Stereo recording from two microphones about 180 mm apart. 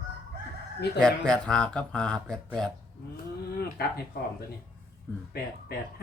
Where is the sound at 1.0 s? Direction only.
5° left (ahead or behind).